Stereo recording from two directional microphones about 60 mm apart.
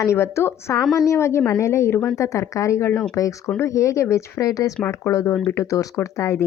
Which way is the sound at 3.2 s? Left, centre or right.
Left.